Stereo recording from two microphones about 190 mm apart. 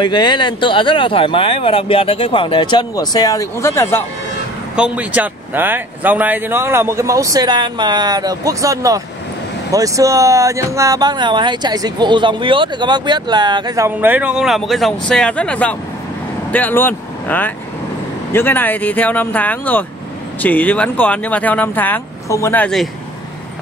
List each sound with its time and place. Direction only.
0.0 s speech: 25° left (ahead or behind)
4.7 s speech: 5° right (ahead or behind)